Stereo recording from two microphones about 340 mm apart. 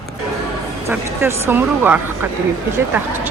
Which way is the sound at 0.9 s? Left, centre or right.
Centre.